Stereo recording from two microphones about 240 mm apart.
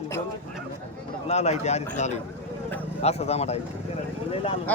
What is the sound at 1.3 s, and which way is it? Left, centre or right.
Speech, left.